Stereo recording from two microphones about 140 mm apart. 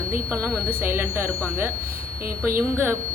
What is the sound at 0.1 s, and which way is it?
Sine wave, 15° right (ahead or behind).